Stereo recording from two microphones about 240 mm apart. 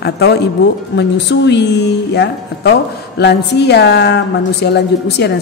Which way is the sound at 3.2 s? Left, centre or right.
Left.